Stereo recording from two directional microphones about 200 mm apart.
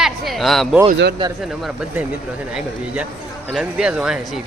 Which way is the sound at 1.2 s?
25° right (ahead or behind).